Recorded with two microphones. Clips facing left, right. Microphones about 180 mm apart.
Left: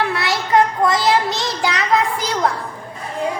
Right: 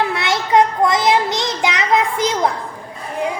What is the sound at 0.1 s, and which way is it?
Child singing, 20° right (ahead or behind).